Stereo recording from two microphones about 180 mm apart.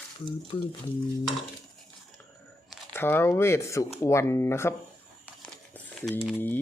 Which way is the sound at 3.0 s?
10° left (ahead or behind).